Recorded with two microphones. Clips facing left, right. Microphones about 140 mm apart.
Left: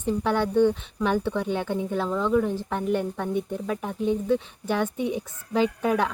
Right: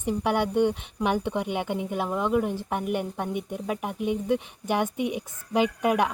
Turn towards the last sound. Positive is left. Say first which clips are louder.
# even
turn(degrees=-15)  # may be behind; listen again after turning